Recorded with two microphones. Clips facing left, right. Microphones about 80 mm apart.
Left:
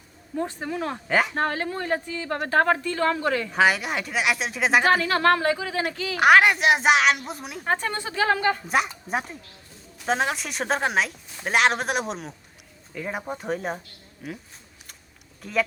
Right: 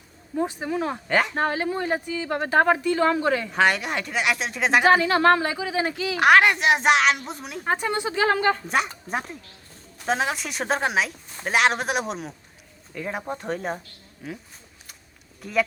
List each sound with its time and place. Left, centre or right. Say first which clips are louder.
0.3 s a woman's voice: right 3 dB; centre
1.4 s a woman's voice: right 2 dB; centre
3.5 s a woman's voice: even; centre
5.0 s a woman's voice: right 1 dB; centre
6.1 s a woman's voice: even; centre
7.7 s speech: right 2 dB; centre
8.3 s a woman's voice: even; right
8.6 s a woman's voice: left 1 dB; centre